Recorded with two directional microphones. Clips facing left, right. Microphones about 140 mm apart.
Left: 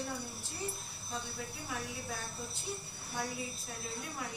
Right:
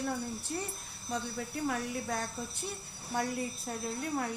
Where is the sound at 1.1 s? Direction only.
60° right (ahead or behind).